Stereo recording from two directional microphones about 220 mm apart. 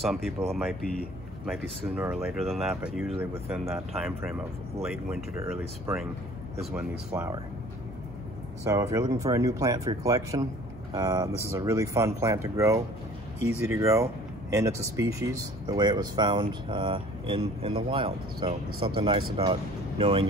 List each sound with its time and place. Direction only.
0.0 s speech: centre (ahead or behind)
5.4 s speech: 10° right (ahead or behind)
8.6 s speech: 15° right (ahead or behind)